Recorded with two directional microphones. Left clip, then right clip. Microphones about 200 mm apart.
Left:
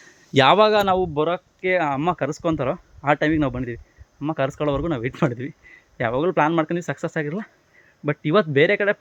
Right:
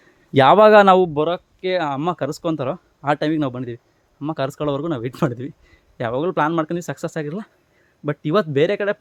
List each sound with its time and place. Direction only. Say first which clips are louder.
0.3 s speech: right 3 dB; 20° right (ahead or behind)
0.6 s speech: right 6 dB; 45° right (ahead or behind)
0.9 s speech: right 7 dB; 55° right (ahead or behind)
1.1 s speech: right 1 dB; 20° right (ahead or behind)